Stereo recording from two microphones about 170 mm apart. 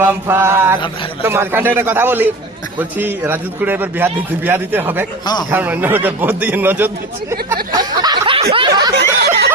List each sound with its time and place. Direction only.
0.0 s a man's voice: 10° right (ahead or behind)
5.2 s a man's voice: 25° left (ahead or behind)
5.5 s a man's voice: 10° right (ahead or behind)
7.5 s a sound: 25° right (ahead or behind)
8.5 s snicker: 25° right (ahead or behind)
9.0 s snicker: 70° right (ahead or behind)